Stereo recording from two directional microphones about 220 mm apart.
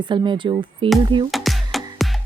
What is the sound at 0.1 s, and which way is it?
Speech, 20° right (ahead or behind).